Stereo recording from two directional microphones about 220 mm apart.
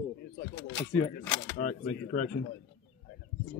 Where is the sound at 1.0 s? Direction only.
35° left (ahead or behind).